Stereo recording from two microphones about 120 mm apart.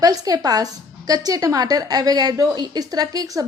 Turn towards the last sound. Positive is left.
turn(degrees=-30)  # may be behind; listen again after turning